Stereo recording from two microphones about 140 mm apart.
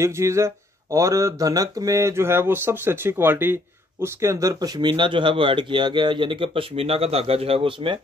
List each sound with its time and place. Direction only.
0.0 s speech: 20° right (ahead or behind); by 8.0 s 40° right (ahead or behind)